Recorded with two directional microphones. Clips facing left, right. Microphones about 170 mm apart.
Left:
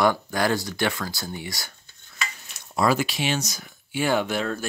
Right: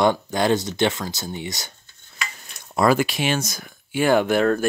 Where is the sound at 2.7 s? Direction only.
55° right (ahead or behind).